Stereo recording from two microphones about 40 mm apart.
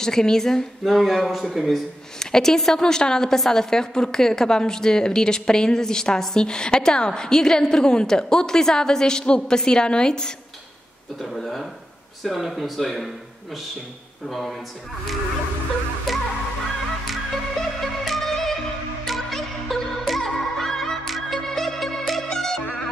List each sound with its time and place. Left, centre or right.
0.0 s a woman's voice: centre
0.8 s speech: centre
2.1 s a woman's voice: centre
11.1 s speech: centre
16.1 s music: centre